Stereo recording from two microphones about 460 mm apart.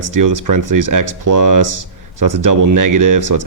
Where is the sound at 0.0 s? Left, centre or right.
Right.